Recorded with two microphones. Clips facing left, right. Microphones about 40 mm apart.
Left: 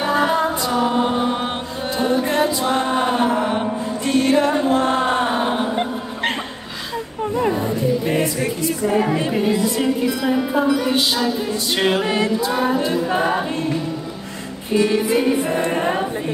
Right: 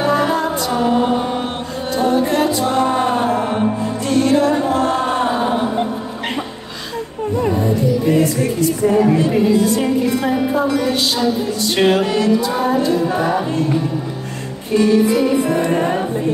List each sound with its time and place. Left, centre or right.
0.2 s music: left
2.0 s music: right
2.6 s music: left
9.7 s music: right
12.0 s music: left
14.9 s music: left